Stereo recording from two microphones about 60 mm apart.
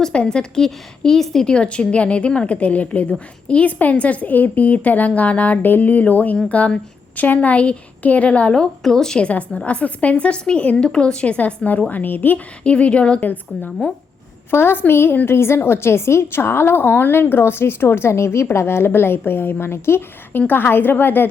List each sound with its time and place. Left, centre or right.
0.0 s a woman's voice: centre
8.5 s a woman's voice: centre; by 12.4 s left
12.6 s a woman's voice: centre; by 21.2 s left